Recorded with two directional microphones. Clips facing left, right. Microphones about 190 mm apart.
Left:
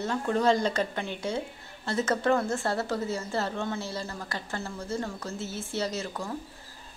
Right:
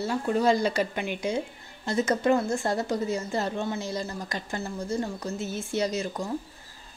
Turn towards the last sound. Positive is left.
turn(degrees=-15)  # may be behind; listen again after turning